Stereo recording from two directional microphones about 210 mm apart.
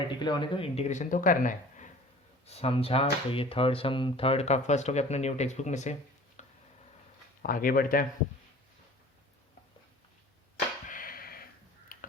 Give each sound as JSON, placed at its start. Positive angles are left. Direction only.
{"t": 0.2, "sound": "speech", "side_deg": 20}
{"t": 7.4, "sound": "speech", "side_deg": 40}
{"t": 10.8, "sound": "a sound", "side_deg": 40}
{"t": 11.9, "sound": "tick-tock", "side_deg": 40}